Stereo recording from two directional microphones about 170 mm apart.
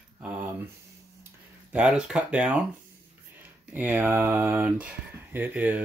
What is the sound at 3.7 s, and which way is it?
Speech, 10° right (ahead or behind).